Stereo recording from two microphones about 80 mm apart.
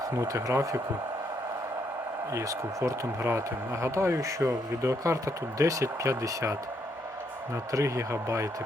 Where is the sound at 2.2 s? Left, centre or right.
Right.